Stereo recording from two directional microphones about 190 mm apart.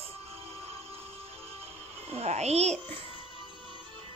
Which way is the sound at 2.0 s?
35° right (ahead or behind).